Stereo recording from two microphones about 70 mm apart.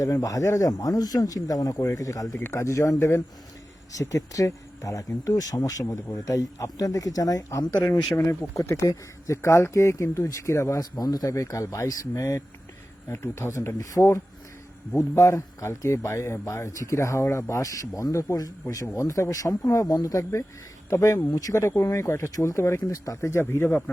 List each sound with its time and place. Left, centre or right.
0.0 s speech: left
1.8 s speech: left
2.3 s speech: left
8.1 s speech: left
10.8 s speech: left
11.3 s speech: left
17.5 s speech: left
20.9 s speech: left
21.2 s speech: left
21.6 s speech: left